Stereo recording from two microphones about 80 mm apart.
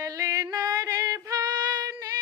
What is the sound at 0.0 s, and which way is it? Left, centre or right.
Music, right.